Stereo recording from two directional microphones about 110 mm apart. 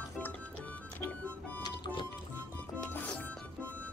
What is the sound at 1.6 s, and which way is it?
Music, 40° left (ahead or behind).